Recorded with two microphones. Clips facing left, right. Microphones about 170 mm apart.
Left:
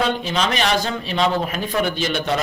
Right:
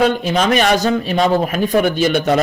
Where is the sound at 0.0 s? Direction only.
50° right (ahead or behind).